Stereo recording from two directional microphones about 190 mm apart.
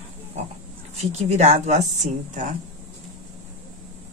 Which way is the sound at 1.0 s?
35° right (ahead or behind).